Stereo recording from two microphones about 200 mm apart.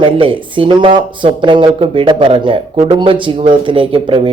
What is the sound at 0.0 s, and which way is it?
Speech, 25° right (ahead or behind).